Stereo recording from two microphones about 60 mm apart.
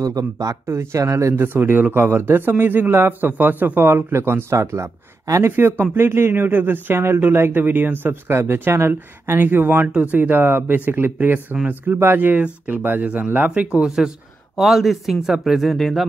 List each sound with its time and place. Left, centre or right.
0.0 s speech: right
0.9 s speech: right
1.3 s speech: right
5.6 s speech: right
13.7 s speech: centre